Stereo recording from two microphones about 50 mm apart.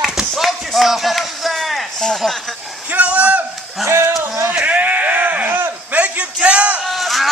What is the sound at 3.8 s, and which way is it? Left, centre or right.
Music, right.